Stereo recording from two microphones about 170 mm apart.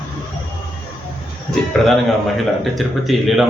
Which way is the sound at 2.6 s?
Centre (ahead or behind).